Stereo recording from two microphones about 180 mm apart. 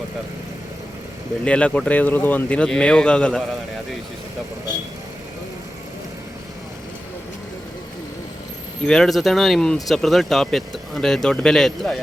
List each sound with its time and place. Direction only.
1.5 s speech: 5° left (ahead or behind)
8.8 s speech: 5° left (ahead or behind)